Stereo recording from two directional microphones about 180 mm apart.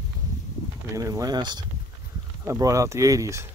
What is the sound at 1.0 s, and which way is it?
Speech, 20° right (ahead or behind).